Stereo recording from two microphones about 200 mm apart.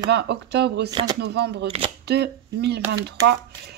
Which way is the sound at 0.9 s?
25° right (ahead or behind).